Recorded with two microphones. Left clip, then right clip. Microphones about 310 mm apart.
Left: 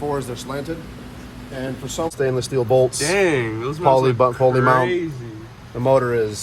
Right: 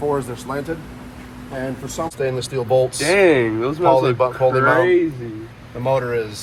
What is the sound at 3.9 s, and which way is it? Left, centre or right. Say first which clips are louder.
Speech: left 1 dB; left.